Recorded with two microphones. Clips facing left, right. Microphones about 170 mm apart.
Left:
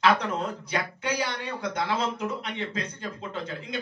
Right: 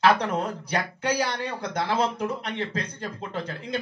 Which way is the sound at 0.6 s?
35° right (ahead or behind).